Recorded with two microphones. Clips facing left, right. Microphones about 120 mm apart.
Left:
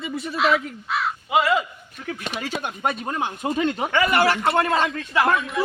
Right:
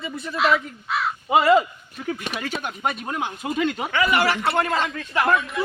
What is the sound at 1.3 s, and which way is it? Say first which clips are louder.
Speech: right 4 dB; 40° right (ahead or behind).